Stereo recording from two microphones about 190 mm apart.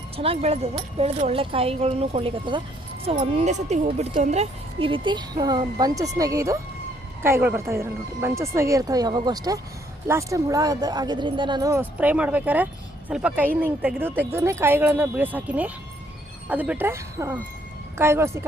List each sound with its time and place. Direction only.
0.2 s a woman's voice: 30° right (ahead or behind); by 18.4 s 15° right (ahead or behind)